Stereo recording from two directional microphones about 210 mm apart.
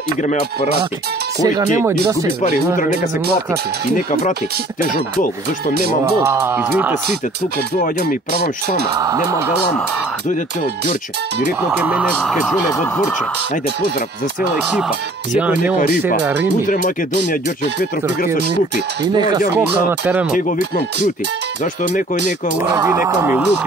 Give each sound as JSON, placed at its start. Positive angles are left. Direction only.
{"t": 0.2, "sound": "speech", "side_deg": 30}
{"t": 1.4, "sound": "speech", "side_deg": -15}
{"t": 3.9, "sound": "speech", "side_deg": 40}
{"t": 6.2, "sound": "speech", "side_deg": -10}
{"t": 7.8, "sound": "speech", "side_deg": 40}
{"t": 9.0, "sound": "speech", "side_deg": -15}
{"t": 11.7, "sound": "speech", "side_deg": -5}
{"t": 15.3, "sound": "speech", "side_deg": -5}
{"t": 16.6, "sound": "speech", "side_deg": 40}
{"t": 19.1, "sound": "speech", "side_deg": -20}
{"t": 19.9, "sound": "speech", "side_deg": -5}
{"t": 22.6, "sound": "speech", "side_deg": -10}